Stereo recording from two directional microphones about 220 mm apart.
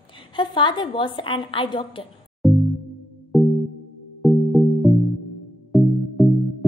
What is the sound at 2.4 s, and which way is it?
Music, centre (ahead or behind).